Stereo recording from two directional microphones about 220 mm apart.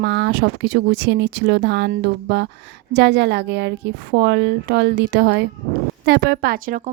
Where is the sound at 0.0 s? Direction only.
50° right (ahead or behind).